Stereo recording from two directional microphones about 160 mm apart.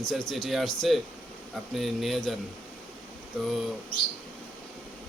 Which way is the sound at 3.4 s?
Centre (ahead or behind).